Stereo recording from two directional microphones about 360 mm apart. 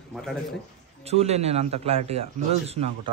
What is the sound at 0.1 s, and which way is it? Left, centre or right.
Speech, centre.